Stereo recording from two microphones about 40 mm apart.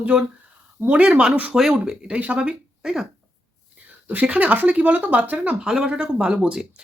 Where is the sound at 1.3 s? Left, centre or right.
Right.